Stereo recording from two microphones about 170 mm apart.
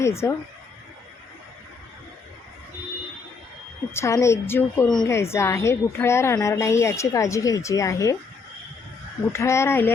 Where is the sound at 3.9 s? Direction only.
15° left (ahead or behind).